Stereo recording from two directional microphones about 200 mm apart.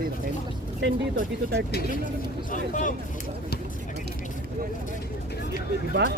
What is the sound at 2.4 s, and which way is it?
Speech, 40° left (ahead or behind).